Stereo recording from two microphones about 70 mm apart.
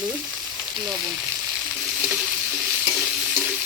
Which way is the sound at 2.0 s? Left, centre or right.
Right.